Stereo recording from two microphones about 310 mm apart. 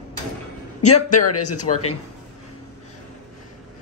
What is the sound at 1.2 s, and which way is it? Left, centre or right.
Speech, left.